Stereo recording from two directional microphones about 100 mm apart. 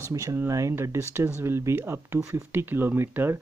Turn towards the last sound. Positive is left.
turn(degrees=-25)  # may be behind; listen again after turning